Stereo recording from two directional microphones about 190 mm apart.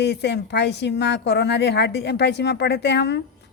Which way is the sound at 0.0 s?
60° left (ahead or behind).